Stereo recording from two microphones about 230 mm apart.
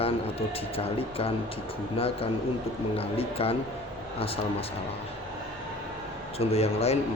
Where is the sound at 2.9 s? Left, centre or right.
Left.